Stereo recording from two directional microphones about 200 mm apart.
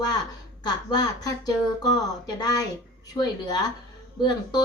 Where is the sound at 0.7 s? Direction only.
20° left (ahead or behind).